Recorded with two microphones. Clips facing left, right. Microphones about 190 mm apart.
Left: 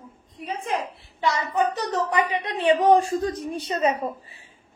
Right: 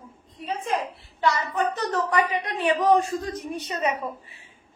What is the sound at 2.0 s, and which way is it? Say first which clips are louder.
A woman's voice: even; 25° left (ahead or behind).